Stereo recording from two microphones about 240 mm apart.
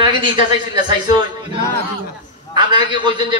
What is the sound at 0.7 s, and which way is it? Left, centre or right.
A man's voice, centre.